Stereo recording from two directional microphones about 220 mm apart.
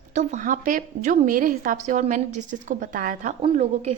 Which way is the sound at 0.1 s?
35° right (ahead or behind).